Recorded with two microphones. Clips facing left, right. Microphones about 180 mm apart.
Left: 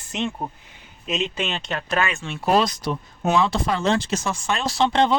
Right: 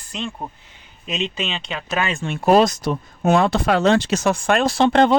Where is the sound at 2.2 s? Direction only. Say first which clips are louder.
Right 8 dB; 50° right (ahead or behind).